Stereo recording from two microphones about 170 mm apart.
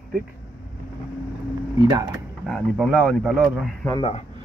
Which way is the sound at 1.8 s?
25° right (ahead or behind).